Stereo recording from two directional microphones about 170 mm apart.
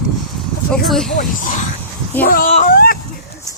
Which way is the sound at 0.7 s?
Centre (ahead or behind).